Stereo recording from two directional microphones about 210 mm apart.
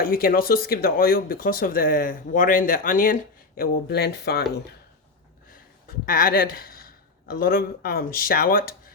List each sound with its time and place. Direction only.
0.0 s speech: 45° left (ahead or behind)
5.5 s a sound: 45° left (ahead or behind)
7.3 s speech: 45° left (ahead or behind)